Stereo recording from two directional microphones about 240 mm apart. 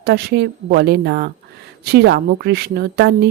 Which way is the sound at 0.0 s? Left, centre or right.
Right.